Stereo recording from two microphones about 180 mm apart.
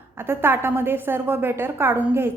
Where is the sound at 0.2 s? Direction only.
10° right (ahead or behind).